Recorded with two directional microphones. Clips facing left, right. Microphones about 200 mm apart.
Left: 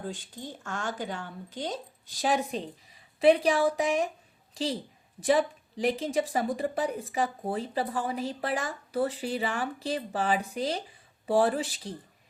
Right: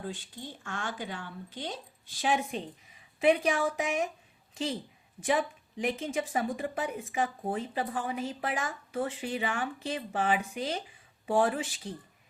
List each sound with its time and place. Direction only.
0.0 s a woman's voice: 45° left (ahead or behind)